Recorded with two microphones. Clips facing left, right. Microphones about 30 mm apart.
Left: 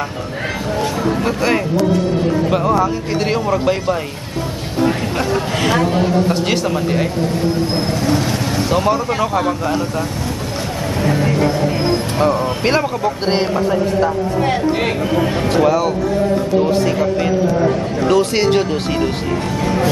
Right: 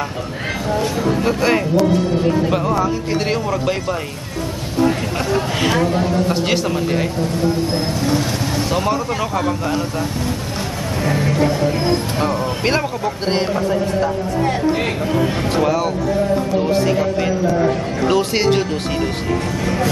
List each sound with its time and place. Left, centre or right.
0.7 s a man's voice: centre
5.9 s a man's voice: centre
6.2 s a man's voice: centre
8.6 s a man's voice: centre
11.1 s a man's voice: centre
15.4 s a man's voice: centre
19.6 s music: centre